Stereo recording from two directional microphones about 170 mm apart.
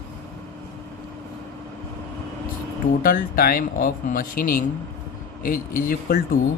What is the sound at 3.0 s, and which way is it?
Speech, 55° left (ahead or behind).